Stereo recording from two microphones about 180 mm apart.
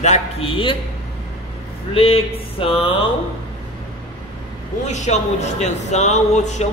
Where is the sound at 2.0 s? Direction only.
30° left (ahead or behind).